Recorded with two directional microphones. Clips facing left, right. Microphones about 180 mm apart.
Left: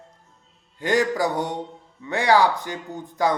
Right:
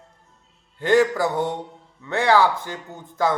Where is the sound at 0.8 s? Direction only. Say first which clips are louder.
Right 3 dB; 15° left (ahead or behind).